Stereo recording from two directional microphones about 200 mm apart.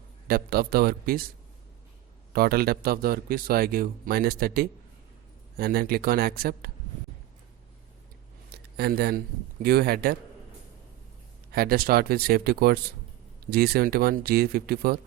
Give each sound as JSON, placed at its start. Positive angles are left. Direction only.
{"t": 0.3, "sound": "speech", "side_deg": -50}
{"t": 2.3, "sound": "speech", "side_deg": -50}
{"t": 8.5, "sound": "speech", "side_deg": -55}
{"t": 11.5, "sound": "speech", "side_deg": -50}